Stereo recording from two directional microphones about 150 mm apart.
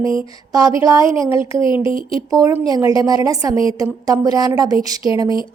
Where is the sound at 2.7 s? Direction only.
25° right (ahead or behind).